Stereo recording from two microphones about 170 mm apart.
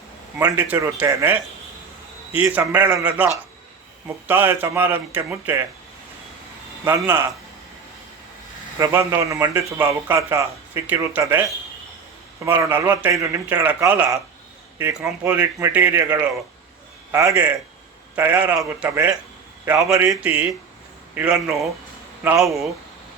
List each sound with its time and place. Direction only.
0.3 s a man's voice: 15° right (ahead or behind)
4.3 s a man's voice: 10° right (ahead or behind)
6.8 s a man's voice: 15° right (ahead or behind)
8.8 s a man's voice: 15° right (ahead or behind)
12.5 s a man's voice: 15° right (ahead or behind)
19.9 s a man's voice: 5° right (ahead or behind)